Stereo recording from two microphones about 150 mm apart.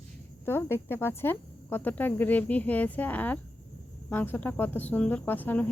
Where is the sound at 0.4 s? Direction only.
15° left (ahead or behind).